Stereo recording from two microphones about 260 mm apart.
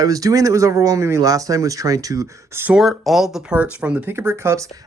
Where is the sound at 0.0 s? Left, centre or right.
Centre.